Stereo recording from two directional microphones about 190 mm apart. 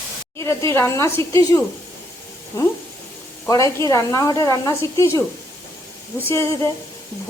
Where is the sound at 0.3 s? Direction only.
15° left (ahead or behind).